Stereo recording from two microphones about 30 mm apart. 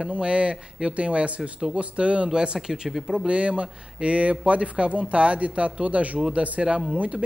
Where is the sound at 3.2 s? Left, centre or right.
Right.